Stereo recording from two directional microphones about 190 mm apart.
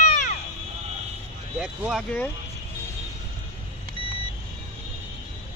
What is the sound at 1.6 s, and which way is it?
Speech, centre (ahead or behind).